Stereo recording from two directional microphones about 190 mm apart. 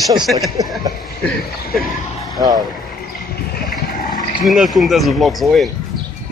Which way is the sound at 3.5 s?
45° left (ahead or behind).